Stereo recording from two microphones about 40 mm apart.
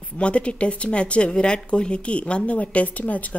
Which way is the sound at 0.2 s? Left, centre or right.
Left.